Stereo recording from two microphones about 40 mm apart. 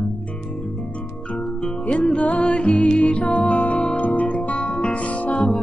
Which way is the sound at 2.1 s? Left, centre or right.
Left.